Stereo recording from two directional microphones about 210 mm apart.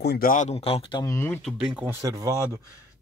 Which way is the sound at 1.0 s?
10° left (ahead or behind).